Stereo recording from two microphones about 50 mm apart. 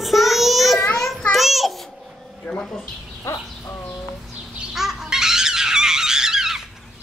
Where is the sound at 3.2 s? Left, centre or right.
Left.